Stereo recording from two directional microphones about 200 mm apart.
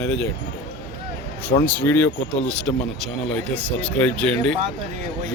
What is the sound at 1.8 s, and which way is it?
Speech, 10° left (ahead or behind).